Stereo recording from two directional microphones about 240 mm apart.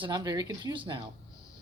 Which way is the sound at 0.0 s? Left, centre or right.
Centre.